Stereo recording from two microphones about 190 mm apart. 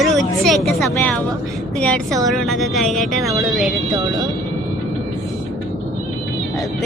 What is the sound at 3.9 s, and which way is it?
Speech, 20° right (ahead or behind).